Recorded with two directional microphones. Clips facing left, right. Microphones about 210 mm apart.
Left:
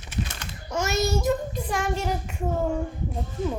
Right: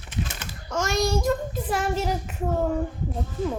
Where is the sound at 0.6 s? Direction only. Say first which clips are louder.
Right 1 dB; 10° left (ahead or behind).